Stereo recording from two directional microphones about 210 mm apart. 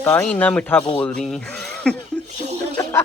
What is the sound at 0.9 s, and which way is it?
Speech, 5° left (ahead or behind).